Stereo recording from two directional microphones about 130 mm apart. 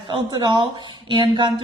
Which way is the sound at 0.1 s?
35° right (ahead or behind).